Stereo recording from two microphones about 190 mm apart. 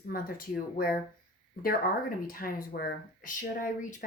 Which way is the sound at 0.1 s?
50° left (ahead or behind).